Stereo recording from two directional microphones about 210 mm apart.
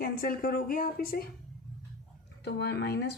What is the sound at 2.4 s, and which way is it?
Speech, 55° left (ahead or behind).